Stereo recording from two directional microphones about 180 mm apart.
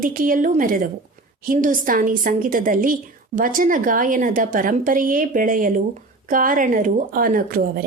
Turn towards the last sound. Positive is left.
turn(degrees=-55)  # may be behind; listen again after turning